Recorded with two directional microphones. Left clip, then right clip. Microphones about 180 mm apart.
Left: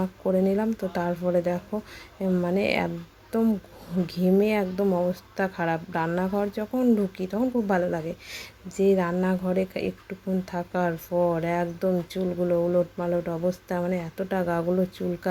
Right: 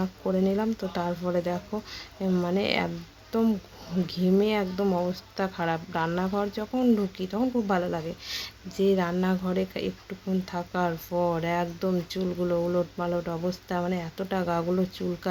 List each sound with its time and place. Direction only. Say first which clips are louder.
0.0 s speech: left 3 dB; 10° left (ahead or behind)
4.0 s speech: left 2 dB; 15° left (ahead or behind)